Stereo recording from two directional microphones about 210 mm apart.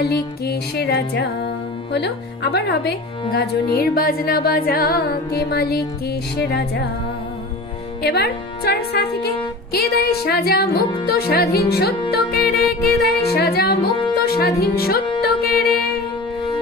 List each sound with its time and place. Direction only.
0.0 s music: 50° left (ahead or behind)
1.9 s speech: 50° left (ahead or behind)
8.0 s speech: 50° left (ahead or behind)
15.2 s music: 45° left (ahead or behind)